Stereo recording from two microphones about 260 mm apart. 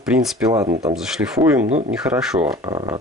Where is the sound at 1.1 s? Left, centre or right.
Centre.